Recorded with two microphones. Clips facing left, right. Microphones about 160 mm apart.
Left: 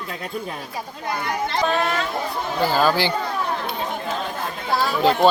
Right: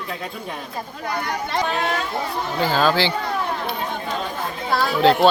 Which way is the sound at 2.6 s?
10° left (ahead or behind).